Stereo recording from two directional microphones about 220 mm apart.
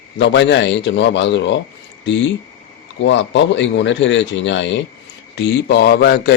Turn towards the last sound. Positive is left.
turn(degrees=45)  # may be behind; listen again after turning